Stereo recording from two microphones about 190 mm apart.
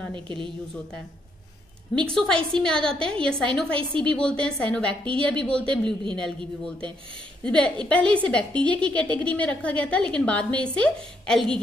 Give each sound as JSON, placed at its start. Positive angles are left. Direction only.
{"t": 0.1, "sound": "a woman's voice", "side_deg": -25}
{"t": 2.0, "sound": "a woman's voice", "side_deg": 5}